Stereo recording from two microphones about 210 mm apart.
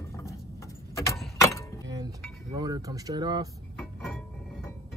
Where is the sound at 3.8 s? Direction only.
5° left (ahead or behind).